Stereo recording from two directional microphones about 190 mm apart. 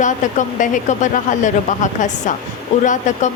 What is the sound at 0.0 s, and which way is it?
Speech, 40° left (ahead or behind).